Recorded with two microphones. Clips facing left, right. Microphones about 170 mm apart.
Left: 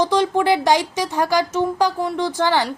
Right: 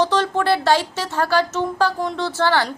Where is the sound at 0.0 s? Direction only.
10° left (ahead or behind).